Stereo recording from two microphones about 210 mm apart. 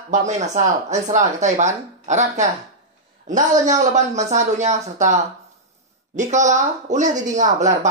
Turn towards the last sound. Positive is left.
turn(degrees=-35)  # may be behind; listen again after turning